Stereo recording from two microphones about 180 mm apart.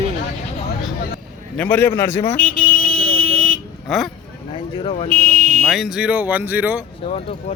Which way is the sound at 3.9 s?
Centre (ahead or behind).